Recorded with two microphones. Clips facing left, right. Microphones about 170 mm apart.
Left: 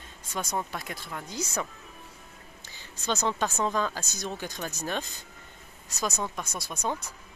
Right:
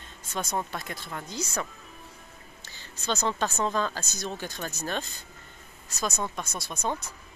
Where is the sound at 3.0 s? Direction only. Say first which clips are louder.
Even; 15° left (ahead or behind).